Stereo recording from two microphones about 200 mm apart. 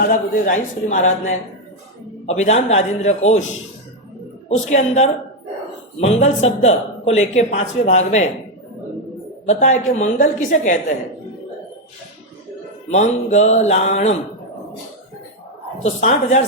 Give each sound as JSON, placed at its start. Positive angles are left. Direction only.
{"t": 0.1, "sound": "a man's voice", "side_deg": 40}
{"t": 2.2, "sound": "a man's voice", "side_deg": 35}
{"t": 4.4, "sound": "a man's voice", "side_deg": 35}
{"t": 9.5, "sound": "a man's voice", "side_deg": 35}
{"t": 12.9, "sound": "a man's voice", "side_deg": 35}
{"t": 15.8, "sound": "a man's voice", "side_deg": 35}